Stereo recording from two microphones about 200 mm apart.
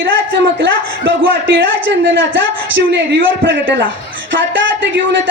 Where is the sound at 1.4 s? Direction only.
60° right (ahead or behind).